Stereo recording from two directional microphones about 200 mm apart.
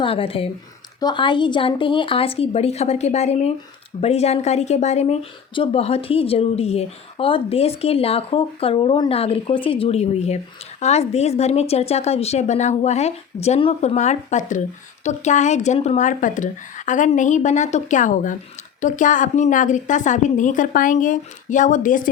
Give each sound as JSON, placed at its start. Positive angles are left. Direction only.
{"t": 0.0, "sound": "speech", "side_deg": 25}